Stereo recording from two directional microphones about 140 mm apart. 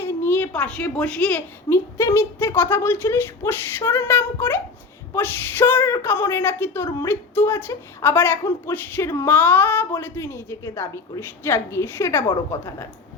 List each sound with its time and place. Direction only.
0.0 s a woman's voice: 15° left (ahead or behind)